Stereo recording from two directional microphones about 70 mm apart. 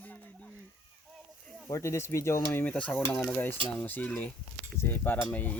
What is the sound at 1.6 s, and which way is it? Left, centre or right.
Speech, left.